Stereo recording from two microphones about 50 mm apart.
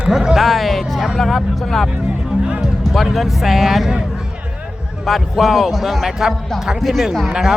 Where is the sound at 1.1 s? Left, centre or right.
Centre.